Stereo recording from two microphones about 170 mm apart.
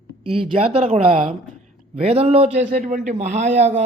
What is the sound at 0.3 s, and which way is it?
A man's voice, 35° right (ahead or behind).